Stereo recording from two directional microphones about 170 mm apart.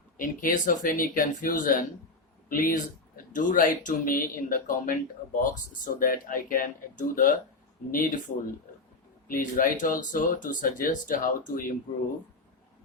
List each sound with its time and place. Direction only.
0.2 s speech: 50° left (ahead or behind)
9.2 s speech: 55° left (ahead or behind)